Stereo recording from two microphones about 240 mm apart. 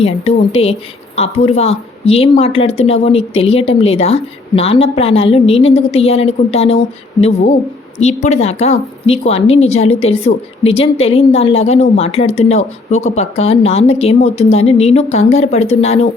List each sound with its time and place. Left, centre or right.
0.0 s a woman's voice: left